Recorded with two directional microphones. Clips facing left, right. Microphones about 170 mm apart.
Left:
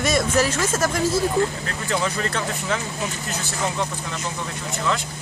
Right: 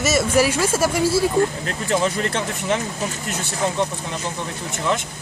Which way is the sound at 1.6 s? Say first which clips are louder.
Right 4 dB; 20° right (ahead or behind).